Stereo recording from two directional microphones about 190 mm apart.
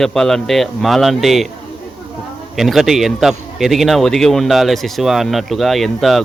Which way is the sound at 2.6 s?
Centre (ahead or behind).